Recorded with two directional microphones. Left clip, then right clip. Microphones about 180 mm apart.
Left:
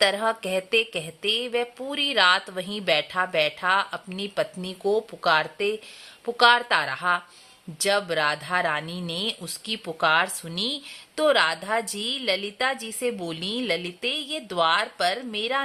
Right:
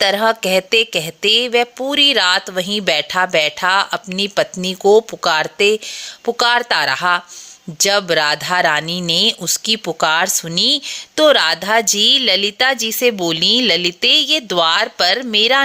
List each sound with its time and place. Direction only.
0.0 s speech: 30° right (ahead or behind)